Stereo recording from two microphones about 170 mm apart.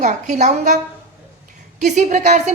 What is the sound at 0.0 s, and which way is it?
Speech, 45° right (ahead or behind).